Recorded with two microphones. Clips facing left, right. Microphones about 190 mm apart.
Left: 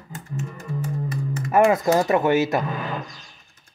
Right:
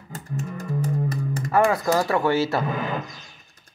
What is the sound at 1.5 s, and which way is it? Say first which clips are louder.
Speech: left 3 dB; 20° left (ahead or behind).